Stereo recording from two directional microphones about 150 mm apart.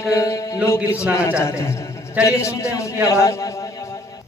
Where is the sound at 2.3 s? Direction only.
20° left (ahead or behind).